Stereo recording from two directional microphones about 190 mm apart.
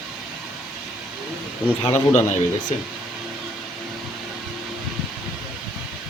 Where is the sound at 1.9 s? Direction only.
35° left (ahead or behind).